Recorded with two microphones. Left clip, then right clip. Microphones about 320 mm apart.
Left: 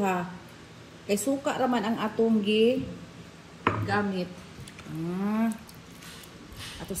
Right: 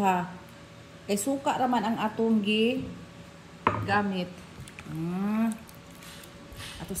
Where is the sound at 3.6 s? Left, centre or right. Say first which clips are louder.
Right 1 dB; right.